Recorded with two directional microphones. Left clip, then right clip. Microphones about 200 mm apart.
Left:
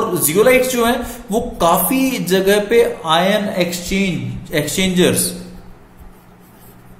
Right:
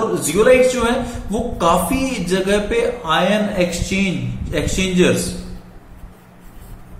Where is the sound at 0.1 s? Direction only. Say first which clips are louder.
Left 1 dB; 45° left (ahead or behind).